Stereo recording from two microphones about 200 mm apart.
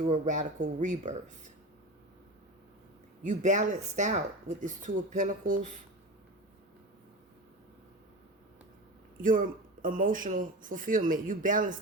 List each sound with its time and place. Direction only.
0.1 s speech: 35° right (ahead or behind)
3.2 s speech: 35° right (ahead or behind)
9.2 s speech: 45° right (ahead or behind)